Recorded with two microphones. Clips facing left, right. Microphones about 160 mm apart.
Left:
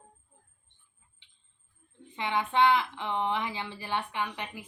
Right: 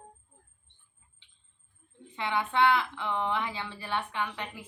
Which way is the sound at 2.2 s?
20° left (ahead or behind).